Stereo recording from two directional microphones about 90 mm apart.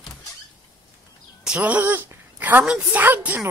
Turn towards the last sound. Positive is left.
turn(degrees=-20)  # may be behind; listen again after turning